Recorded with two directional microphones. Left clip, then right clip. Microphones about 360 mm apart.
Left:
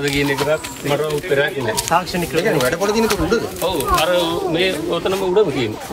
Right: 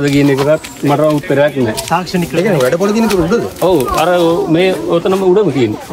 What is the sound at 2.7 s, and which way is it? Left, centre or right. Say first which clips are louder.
Speech: right 5 dB; centre.